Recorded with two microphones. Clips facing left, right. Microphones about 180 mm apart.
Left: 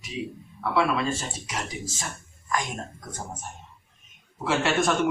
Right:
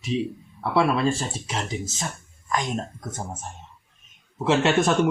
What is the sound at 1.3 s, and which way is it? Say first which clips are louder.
Speech: right 4 dB; 25° right (ahead or behind).